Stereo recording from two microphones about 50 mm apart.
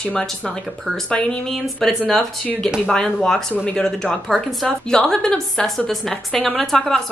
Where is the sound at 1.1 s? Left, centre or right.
Centre.